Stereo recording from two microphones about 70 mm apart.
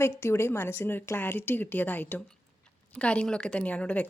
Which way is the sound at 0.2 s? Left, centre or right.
Left.